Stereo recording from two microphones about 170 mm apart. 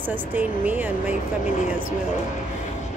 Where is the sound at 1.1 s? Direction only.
45° left (ahead or behind).